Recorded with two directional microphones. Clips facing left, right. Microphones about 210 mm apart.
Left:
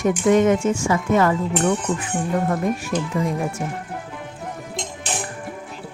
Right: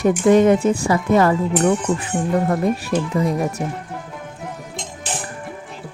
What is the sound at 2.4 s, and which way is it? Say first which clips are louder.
Speech: right 3 dB; 35° right (ahead or behind).